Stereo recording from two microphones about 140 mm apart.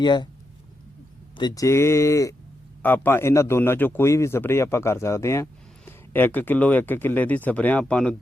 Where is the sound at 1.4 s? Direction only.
25° left (ahead or behind).